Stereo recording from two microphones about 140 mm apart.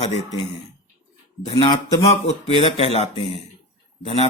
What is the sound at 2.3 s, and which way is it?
Speech, 50° left (ahead or behind).